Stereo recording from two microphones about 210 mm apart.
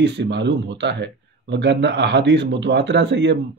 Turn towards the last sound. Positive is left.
turn(degrees=-55)  # may be behind; listen again after turning